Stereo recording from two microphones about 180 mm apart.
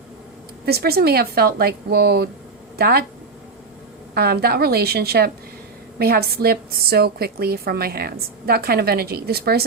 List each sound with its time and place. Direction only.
0.6 s a woman's voice: 60° right (ahead or behind)
4.1 s a woman's voice: 60° right (ahead or behind)